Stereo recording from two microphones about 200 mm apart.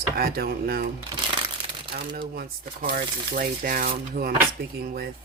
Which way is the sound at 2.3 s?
45° right (ahead or behind).